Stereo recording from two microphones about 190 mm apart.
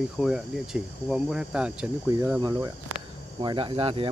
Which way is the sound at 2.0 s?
15° right (ahead or behind).